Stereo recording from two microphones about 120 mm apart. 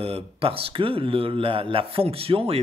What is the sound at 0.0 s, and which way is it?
A man's voice, 55° right (ahead or behind).